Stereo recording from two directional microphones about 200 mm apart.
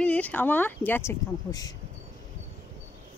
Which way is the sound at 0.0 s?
5° left (ahead or behind).